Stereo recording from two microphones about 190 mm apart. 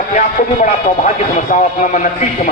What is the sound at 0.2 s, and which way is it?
Speech, 40° left (ahead or behind).